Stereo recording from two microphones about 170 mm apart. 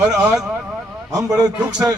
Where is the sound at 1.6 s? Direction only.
5° right (ahead or behind).